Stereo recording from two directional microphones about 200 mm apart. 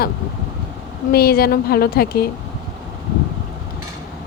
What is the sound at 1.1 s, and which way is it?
Speech, 50° left (ahead or behind).